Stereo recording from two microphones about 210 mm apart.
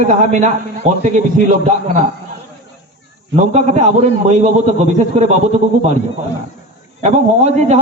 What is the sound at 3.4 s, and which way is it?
A man's voice, 35° right (ahead or behind).